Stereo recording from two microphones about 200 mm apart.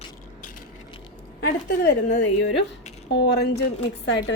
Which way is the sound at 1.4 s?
55° left (ahead or behind).